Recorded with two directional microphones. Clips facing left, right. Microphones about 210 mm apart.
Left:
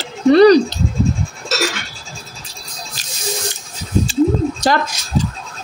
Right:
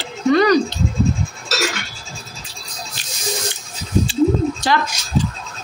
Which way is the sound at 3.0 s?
40° left (ahead or behind).